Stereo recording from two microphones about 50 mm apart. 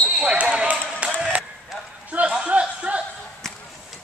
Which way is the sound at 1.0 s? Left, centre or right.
Right.